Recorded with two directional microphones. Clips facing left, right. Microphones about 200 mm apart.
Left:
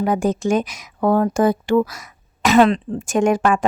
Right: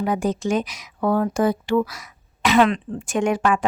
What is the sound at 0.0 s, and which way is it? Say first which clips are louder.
A woman's voice: left 3 dB; 50° left (ahead or behind).